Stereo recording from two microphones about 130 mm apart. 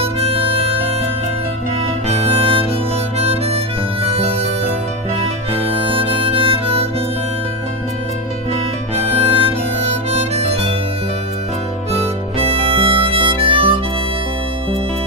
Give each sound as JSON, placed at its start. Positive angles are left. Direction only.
{"t": 0.0, "sound": "harmonica", "side_deg": -50}
{"t": 2.0, "sound": "harmonica", "side_deg": -55}
{"t": 4.1, "sound": "music", "side_deg": -50}
{"t": 5.8, "sound": "harmonica", "side_deg": -45}
{"t": 8.9, "sound": "harmonica", "side_deg": -45}
{"t": 12.4, "sound": "harmonica", "side_deg": -45}